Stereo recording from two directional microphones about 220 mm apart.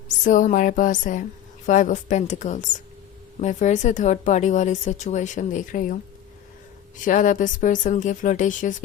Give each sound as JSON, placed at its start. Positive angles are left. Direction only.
{"t": 0.1, "sound": "speech", "side_deg": 35}